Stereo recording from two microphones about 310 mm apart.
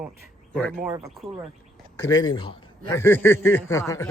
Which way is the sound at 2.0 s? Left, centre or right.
Centre.